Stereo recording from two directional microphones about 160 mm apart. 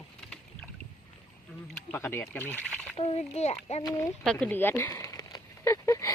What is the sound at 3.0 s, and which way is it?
Speech, 40° left (ahead or behind).